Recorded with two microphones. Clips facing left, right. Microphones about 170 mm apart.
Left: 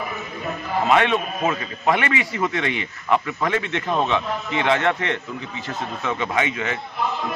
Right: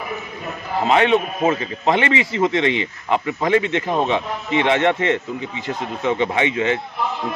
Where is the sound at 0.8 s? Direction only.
25° right (ahead or behind).